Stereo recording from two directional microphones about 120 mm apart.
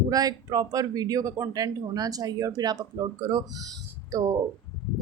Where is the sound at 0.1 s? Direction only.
30° right (ahead or behind).